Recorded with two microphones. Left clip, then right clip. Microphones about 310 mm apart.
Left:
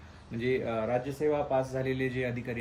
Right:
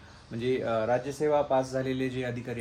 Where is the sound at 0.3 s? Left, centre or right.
Centre.